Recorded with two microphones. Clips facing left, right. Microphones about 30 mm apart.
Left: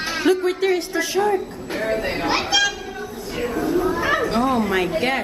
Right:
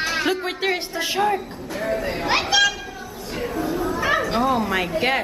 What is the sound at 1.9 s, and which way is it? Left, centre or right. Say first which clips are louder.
Speech: left 1 dB; left.